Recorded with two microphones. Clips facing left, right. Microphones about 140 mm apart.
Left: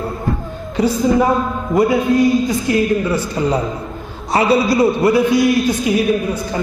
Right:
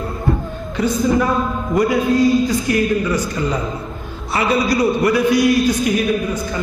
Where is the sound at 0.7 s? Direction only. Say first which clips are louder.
Left 2 dB; 30° left (ahead or behind).